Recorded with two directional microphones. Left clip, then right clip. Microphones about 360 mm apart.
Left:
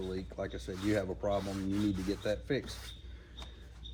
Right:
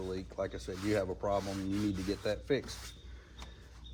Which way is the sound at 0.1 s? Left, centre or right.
Centre.